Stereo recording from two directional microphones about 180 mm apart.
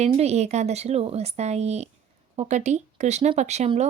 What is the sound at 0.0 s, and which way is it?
Speech, 35° right (ahead or behind).